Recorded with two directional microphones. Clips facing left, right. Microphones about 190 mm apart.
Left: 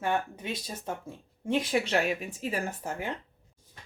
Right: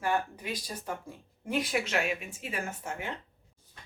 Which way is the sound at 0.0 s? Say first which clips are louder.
Left 1 dB; 25° left (ahead or behind).